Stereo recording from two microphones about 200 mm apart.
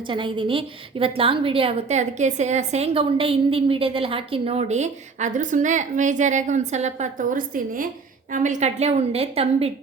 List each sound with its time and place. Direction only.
0.1 s a woman's voice: 25° right (ahead or behind)